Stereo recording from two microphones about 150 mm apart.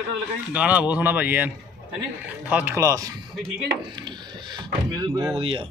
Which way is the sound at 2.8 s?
20° right (ahead or behind).